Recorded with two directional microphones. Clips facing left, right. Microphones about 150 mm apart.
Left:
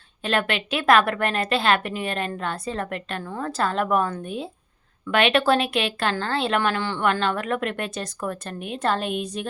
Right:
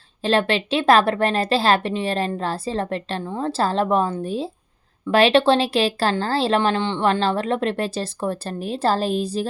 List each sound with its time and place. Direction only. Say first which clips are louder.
0.2 s speech: right 5 dB; 30° right (ahead or behind)